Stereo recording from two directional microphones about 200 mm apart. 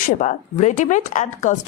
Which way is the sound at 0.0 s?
40° left (ahead or behind).